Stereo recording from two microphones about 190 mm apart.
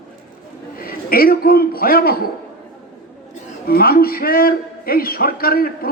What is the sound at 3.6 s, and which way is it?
A man's voice, 50° left (ahead or behind).